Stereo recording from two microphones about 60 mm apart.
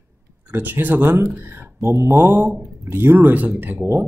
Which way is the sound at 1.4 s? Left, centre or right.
Right.